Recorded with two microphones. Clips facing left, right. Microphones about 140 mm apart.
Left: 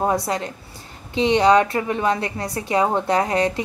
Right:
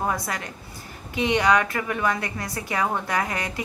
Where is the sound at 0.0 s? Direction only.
30° left (ahead or behind).